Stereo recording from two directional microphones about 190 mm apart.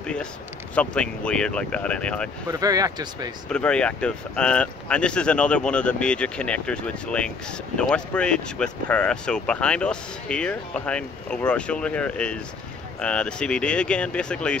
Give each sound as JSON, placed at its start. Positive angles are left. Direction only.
{"t": 0.0, "sound": "speech", "side_deg": 5}
{"t": 2.4, "sound": "speech", "side_deg": -20}
{"t": 3.4, "sound": "speech", "side_deg": 5}